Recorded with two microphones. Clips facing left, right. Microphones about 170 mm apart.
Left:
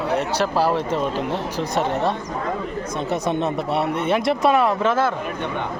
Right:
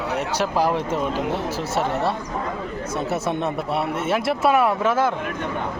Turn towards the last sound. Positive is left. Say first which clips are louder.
# left 1 dB
turn(degrees=-10)  # may be behind; listen again after turning